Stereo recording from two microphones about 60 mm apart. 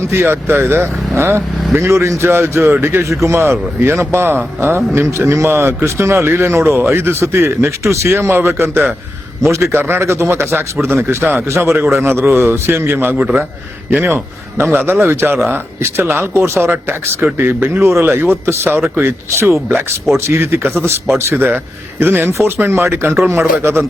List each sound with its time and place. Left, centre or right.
0.1 s a man's voice: right
14.6 s a man's voice: right
22.3 s speech: right